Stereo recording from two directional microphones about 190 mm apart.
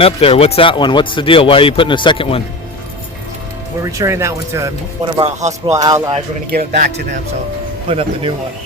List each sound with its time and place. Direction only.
0.0 s speech: 30° left (ahead or behind)
3.9 s speech: 15° right (ahead or behind)
5.4 s speech: 35° right (ahead or behind)
5.7 s speech: 20° right (ahead or behind)
6.5 s speech: 50° right (ahead or behind)
7.9 s speech: 30° right (ahead or behind)